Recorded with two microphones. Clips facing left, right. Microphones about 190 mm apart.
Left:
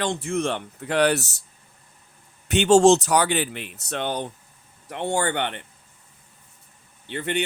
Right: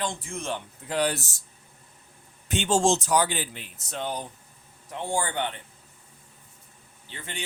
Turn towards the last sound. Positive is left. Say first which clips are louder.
# left 14 dB
turn(degrees=65)  # may be behind; listen again after turning